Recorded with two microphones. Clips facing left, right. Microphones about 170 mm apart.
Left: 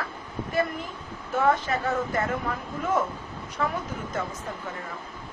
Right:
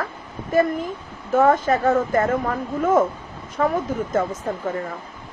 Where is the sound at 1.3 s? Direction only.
45° right (ahead or behind).